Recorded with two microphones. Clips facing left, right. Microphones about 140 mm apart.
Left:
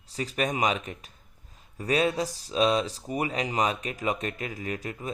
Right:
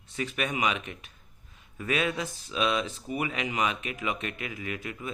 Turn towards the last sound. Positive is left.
turn(degrees=40)  # may be behind; listen again after turning